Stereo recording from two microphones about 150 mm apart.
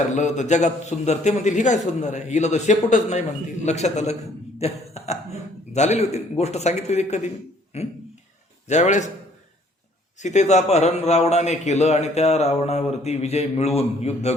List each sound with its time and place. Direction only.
0.1 s a man's voice: 50° left (ahead or behind)
10.2 s a man's voice: 50° left (ahead or behind)